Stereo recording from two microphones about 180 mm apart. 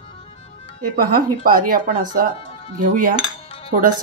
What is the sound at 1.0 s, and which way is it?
Speech, 55° right (ahead or behind).